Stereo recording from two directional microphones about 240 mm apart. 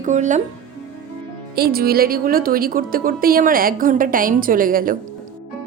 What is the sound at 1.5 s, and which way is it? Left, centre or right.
A woman's voice, right.